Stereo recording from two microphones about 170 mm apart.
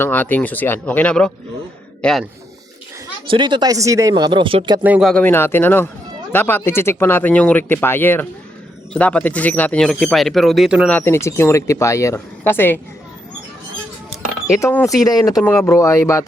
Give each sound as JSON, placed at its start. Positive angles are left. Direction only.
{"t": 0.0, "sound": "a man's voice", "side_deg": 10}
{"t": 3.2, "sound": "speech", "side_deg": -30}
{"t": 4.8, "sound": "speech", "side_deg": -5}
{"t": 5.1, "sound": "speech", "side_deg": 10}
{"t": 10.8, "sound": "speech", "side_deg": 10}
{"t": 14.6, "sound": "speech", "side_deg": 15}